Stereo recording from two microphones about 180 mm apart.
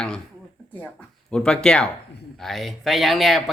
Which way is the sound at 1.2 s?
5° left (ahead or behind).